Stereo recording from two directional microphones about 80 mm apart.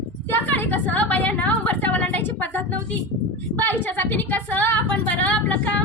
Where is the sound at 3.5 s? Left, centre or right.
Left.